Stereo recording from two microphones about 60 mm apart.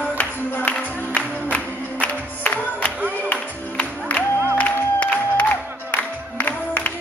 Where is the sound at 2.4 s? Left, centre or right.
Left.